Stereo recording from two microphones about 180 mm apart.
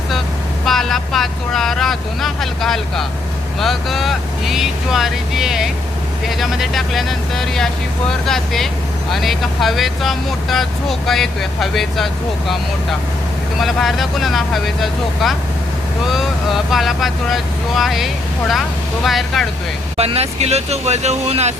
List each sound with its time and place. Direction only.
0.6 s speech: centre (ahead or behind)
13.6 s speech: centre (ahead or behind)
20.0 s speech: 35° right (ahead or behind)